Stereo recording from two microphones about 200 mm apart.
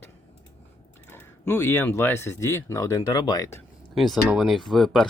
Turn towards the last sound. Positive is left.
turn(degrees=0)  # may be behind; listen again after turning